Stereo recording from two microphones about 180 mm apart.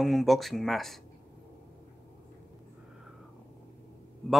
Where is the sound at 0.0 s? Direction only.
Centre (ahead or behind).